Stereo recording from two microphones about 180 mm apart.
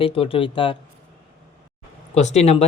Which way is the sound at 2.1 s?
40° left (ahead or behind).